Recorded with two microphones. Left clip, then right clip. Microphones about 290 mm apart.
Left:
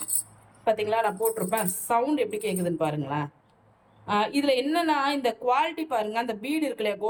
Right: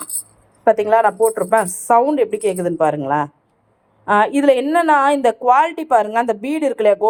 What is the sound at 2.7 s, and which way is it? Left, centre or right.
Speech, right.